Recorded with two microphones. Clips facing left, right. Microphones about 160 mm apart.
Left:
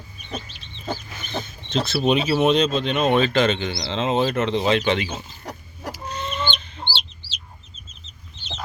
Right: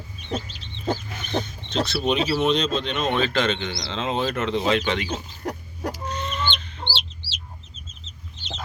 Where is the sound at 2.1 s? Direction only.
5° left (ahead or behind).